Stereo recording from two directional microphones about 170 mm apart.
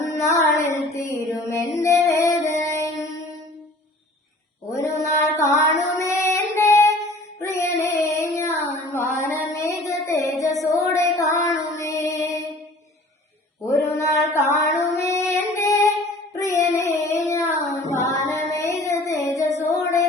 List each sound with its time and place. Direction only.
0.1 s child singing: 15° left (ahead or behind)
0.9 s mantra: 15° left (ahead or behind)
1.8 s music: 15° left (ahead or behind)
2.6 s mantra: 20° left (ahead or behind)
4.7 s mantra: 15° left (ahead or behind)
6.0 s female singing: 20° left (ahead or behind)
9.8 s child singing: 15° left (ahead or behind)
10.6 s music: 20° left (ahead or behind)
14.0 s female singing: 15° left (ahead or behind)
16.4 s child singing: 20° left (ahead or behind)
19.7 s a sound: 20° left (ahead or behind)